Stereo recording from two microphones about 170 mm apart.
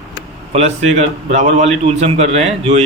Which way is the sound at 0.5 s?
40° right (ahead or behind).